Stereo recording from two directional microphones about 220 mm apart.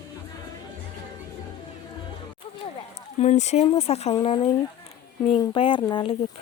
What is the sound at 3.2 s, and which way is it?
Speech, 30° left (ahead or behind).